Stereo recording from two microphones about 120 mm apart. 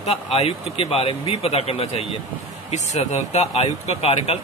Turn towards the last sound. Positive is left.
turn(degrees=60)  # may be behind; listen again after turning